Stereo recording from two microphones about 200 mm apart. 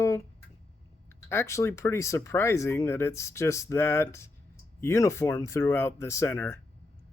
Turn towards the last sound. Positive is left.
turn(degrees=10)  # may be behind; listen again after turning